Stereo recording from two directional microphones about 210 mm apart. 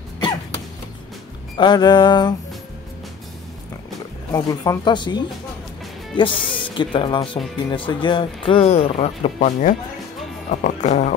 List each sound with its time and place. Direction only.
1.6 s speech: 20° left (ahead or behind)
4.3 s speech: 15° left (ahead or behind); by 11.1 s 35° left (ahead or behind)